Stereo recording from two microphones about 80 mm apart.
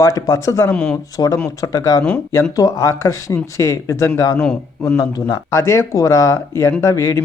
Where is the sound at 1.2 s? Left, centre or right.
Left.